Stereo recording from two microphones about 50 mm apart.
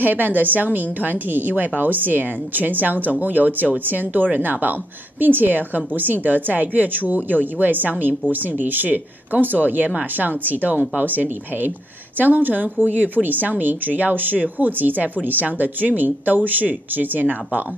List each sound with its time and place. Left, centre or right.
0.0 s speech: right